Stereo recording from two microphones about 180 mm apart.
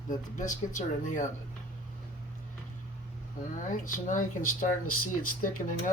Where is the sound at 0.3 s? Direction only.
45° left (ahead or behind).